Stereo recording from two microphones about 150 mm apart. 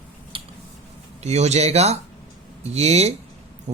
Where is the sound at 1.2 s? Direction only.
45° right (ahead or behind).